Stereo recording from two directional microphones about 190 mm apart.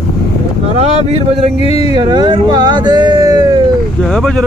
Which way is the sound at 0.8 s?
35° right (ahead or behind).